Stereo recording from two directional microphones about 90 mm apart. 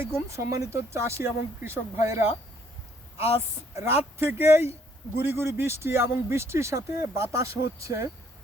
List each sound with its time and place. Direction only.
0.0 s speech: 30° right (ahead or behind)
3.8 s speech: 25° right (ahead or behind)